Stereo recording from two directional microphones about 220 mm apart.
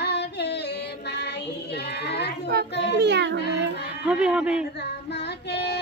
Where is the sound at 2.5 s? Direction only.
45° right (ahead or behind).